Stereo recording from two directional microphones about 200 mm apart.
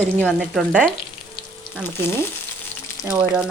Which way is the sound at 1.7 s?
10° left (ahead or behind).